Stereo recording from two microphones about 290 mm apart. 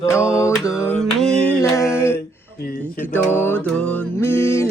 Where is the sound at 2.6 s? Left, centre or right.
Left.